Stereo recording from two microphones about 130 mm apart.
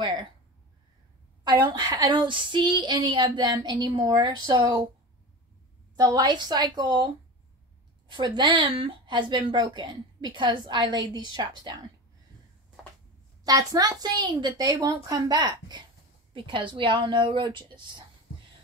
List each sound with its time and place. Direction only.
0.0 s speech: 35° right (ahead or behind)
1.4 s speech: 30° right (ahead or behind)
5.9 s speech: 30° right (ahead or behind)
8.1 s speech: 40° right (ahead or behind)
13.4 s speech: 30° right (ahead or behind)